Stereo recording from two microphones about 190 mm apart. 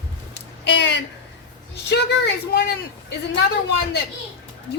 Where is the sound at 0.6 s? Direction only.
65° left (ahead or behind).